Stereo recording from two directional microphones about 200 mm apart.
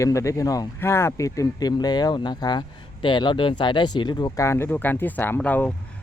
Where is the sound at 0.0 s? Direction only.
15° left (ahead or behind).